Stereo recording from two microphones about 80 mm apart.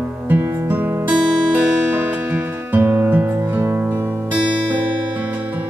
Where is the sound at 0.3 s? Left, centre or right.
Right.